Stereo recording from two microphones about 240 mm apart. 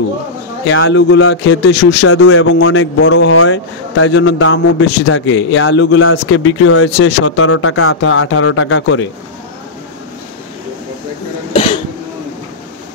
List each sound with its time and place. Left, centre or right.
0.7 s a man's voice: left
2.0 s speech: left
11.5 s cough: left